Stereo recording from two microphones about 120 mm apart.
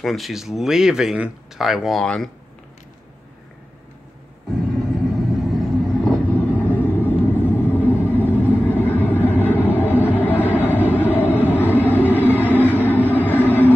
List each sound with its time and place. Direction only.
0.0 s speech: centre (ahead or behind)
5.4 s vehicle: centre (ahead or behind); by 13.7 s 15° left (ahead or behind)